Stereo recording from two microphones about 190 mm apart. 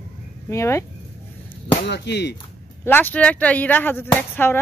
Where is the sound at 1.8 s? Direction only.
65° left (ahead or behind).